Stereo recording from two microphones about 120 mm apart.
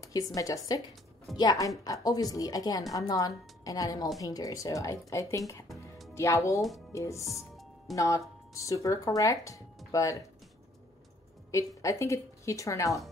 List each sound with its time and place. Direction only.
0.0 s a woman's voice: 30° left (ahead or behind)
11.5 s speech: 25° left (ahead or behind)